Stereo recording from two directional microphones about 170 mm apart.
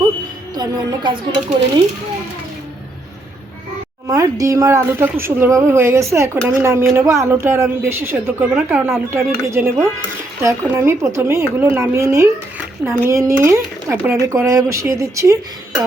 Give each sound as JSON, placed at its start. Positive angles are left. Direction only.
{"t": 0.5, "sound": "speech", "side_deg": -25}
{"t": 4.0, "sound": "speech", "side_deg": -20}